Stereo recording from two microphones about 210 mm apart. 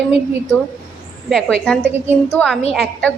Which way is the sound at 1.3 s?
5° left (ahead or behind).